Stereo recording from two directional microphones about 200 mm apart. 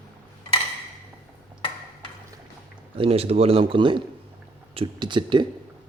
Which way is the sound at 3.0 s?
30° right (ahead or behind).